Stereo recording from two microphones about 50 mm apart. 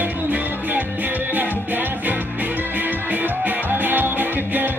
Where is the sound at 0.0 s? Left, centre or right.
Right.